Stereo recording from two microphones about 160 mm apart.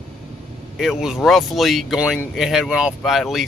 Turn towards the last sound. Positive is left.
turn(degrees=0)  # may be behind; listen again after turning